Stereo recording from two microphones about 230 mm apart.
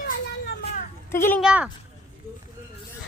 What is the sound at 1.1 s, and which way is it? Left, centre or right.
Speech, centre.